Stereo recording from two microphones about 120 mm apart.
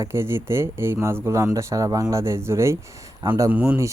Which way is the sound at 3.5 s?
10° right (ahead or behind).